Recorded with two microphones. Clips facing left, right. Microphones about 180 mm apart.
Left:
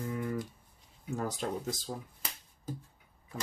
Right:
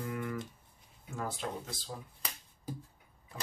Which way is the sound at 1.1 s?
40° left (ahead or behind).